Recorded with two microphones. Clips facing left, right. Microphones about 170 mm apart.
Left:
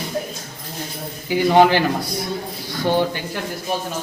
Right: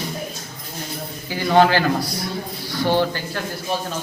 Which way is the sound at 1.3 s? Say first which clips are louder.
Left 2 dB; 15° left (ahead or behind).